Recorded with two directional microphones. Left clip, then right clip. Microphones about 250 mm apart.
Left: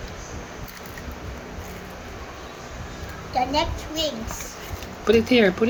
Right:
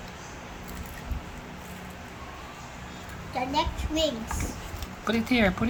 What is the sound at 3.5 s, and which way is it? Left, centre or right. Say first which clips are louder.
Speech: left 4 dB; centre.